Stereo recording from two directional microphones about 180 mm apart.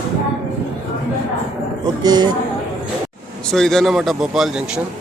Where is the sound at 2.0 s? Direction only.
20° right (ahead or behind).